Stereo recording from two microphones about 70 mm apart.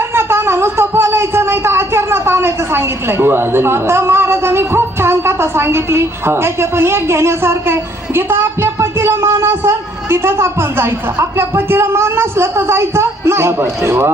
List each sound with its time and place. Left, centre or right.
0.1 s speech: right